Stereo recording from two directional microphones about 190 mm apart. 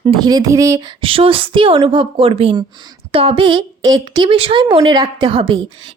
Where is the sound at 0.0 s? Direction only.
20° right (ahead or behind).